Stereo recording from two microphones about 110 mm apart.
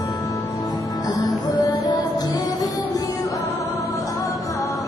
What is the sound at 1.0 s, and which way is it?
Music, 35° left (ahead or behind).